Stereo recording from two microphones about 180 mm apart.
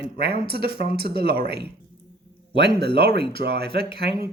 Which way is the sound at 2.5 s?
70° right (ahead or behind).